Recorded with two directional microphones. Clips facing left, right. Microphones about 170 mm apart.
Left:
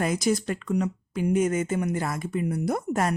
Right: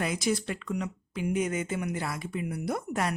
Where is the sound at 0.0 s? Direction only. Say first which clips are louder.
Left 4 dB; 45° left (ahead or behind).